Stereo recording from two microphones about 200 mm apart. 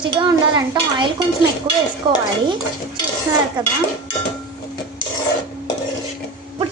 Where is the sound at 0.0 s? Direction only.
20° right (ahead or behind).